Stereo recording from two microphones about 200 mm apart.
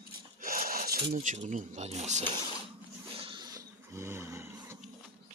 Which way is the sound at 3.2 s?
25° right (ahead or behind).